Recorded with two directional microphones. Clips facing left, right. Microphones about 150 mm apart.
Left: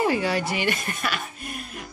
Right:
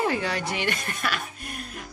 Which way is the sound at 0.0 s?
5° left (ahead or behind).